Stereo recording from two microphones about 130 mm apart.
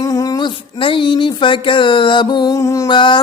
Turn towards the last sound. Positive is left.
turn(degrees=40)  # may be behind; listen again after turning